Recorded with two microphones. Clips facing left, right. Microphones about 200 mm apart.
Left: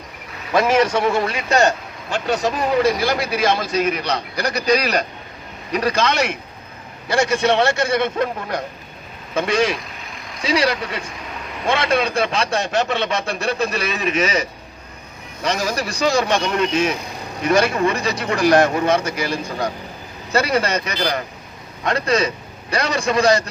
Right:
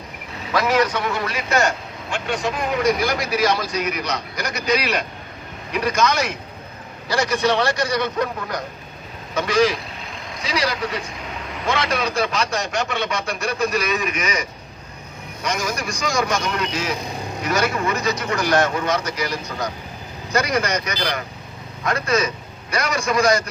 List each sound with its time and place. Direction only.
0.5 s a man's voice: 25° left (ahead or behind)
11.8 s a man's voice: 25° left (ahead or behind)
15.4 s a man's voice: 35° left (ahead or behind)